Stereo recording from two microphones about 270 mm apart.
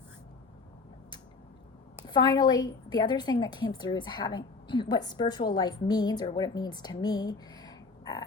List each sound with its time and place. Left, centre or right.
2.0 s a woman's voice: centre